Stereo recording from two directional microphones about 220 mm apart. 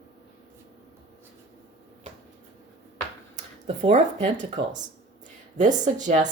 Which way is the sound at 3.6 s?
30° right (ahead or behind).